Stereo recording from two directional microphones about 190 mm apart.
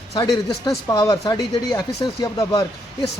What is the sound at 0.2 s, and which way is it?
Speech, 20° left (ahead or behind).